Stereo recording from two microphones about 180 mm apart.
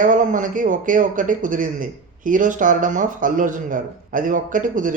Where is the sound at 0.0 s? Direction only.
45° right (ahead or behind).